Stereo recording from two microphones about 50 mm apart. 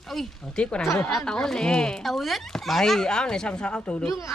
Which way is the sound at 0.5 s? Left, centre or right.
Left.